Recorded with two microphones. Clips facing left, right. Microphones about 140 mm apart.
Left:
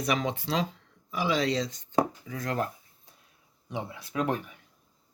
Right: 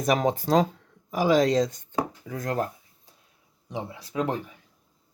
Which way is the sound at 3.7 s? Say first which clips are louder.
Right 2 dB; 30° right (ahead or behind).